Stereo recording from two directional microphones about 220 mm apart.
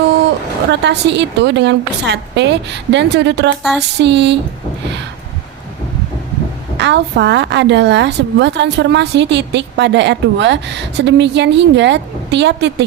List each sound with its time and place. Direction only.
0.7 s a woman's voice: 50° right (ahead or behind)
3.6 s a sound: centre (ahead or behind)
4.0 s a woman's voice: 50° right (ahead or behind)
6.7 s a woman's voice: 50° right (ahead or behind)